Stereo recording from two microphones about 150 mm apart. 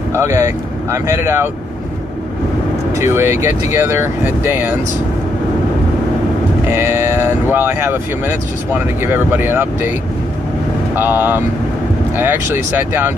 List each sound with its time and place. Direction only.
0.1 s speech: 15° right (ahead or behind)
3.0 s speech: 15° right (ahead or behind)
6.7 s speech: 15° right (ahead or behind)
11.0 s speech: 15° right (ahead or behind)